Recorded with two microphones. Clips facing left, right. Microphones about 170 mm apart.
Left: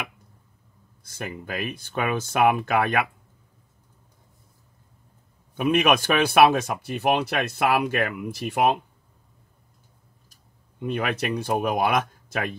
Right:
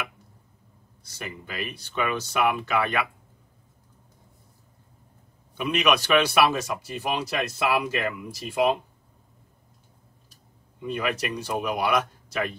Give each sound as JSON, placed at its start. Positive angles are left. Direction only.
{"t": 1.0, "sound": "speech", "side_deg": 50}
{"t": 5.6, "sound": "speech", "side_deg": 50}
{"t": 10.3, "sound": "speech", "side_deg": 55}